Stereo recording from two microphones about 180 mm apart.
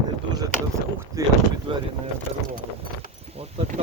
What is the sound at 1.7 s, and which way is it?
Boat, 30° right (ahead or behind).